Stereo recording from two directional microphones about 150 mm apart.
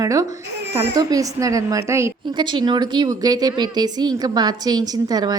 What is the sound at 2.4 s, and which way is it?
Speech, 30° right (ahead or behind).